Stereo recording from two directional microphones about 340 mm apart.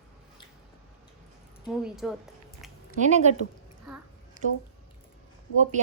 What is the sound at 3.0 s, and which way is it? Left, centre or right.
Speech, centre.